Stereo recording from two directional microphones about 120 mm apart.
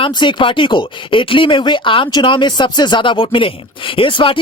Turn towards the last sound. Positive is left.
turn(degrees=50)  # may be behind; listen again after turning